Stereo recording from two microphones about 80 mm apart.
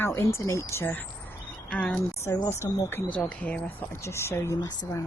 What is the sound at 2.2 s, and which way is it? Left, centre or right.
Speech, left.